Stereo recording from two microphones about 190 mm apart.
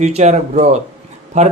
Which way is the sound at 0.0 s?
35° right (ahead or behind).